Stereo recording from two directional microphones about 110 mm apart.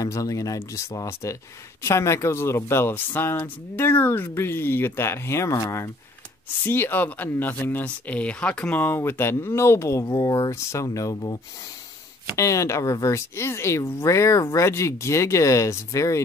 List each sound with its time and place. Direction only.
0.0 s speech: 30° left (ahead or behind)
6.6 s speech: 20° left (ahead or behind); by 11.3 s 35° left (ahead or behind)
12.4 s speech: 30° left (ahead or behind)